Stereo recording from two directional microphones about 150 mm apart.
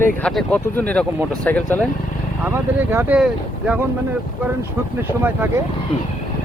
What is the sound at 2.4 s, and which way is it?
Speech, 15° right (ahead or behind).